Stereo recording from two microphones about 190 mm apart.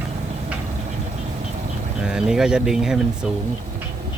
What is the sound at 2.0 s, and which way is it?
Speech, 5° right (ahead or behind).